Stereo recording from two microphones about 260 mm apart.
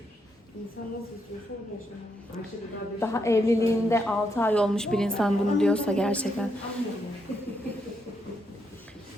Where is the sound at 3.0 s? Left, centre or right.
Centre.